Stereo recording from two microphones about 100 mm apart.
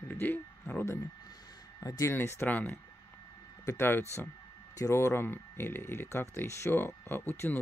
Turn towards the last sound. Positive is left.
turn(degrees=20)  # may be behind; listen again after turning